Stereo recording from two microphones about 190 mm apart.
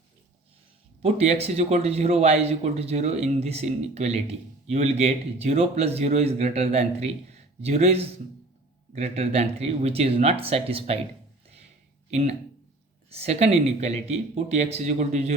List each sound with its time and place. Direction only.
1.0 s a man's voice: 35° right (ahead or behind)
12.1 s a man's voice: 35° right (ahead or behind)